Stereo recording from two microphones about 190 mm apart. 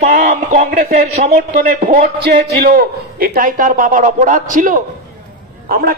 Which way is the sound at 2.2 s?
55° right (ahead or behind).